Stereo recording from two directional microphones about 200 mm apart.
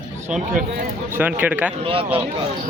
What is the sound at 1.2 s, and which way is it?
Speech, 10° right (ahead or behind).